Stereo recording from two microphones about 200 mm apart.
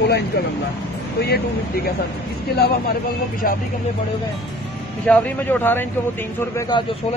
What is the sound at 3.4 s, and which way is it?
Speech, 45° left (ahead or behind).